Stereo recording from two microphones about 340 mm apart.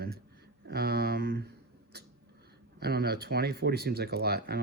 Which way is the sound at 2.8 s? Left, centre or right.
Right.